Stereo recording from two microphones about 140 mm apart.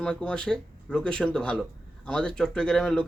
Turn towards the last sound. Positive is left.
turn(degrees=5)  # may be behind; listen again after turning